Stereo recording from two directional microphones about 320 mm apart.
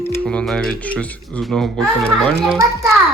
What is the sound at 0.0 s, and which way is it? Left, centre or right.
Speech, centre.